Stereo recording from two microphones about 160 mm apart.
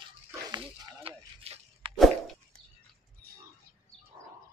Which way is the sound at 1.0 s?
40° right (ahead or behind).